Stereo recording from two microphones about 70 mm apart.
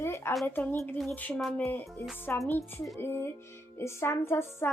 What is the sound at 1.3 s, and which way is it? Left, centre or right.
Speech, centre.